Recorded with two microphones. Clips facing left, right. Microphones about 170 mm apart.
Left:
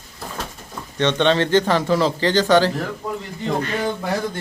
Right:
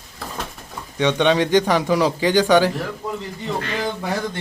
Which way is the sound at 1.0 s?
10° right (ahead or behind).